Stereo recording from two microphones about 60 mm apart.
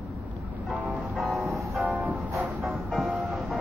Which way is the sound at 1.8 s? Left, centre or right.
Right.